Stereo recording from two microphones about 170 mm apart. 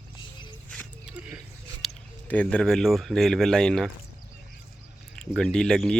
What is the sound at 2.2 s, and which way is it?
Speech, 10° left (ahead or behind).